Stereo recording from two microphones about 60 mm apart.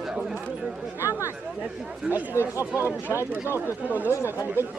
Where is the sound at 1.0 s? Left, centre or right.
Left.